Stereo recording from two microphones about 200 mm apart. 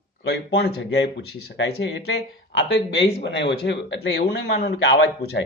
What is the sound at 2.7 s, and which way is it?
A man's voice, 60° left (ahead or behind).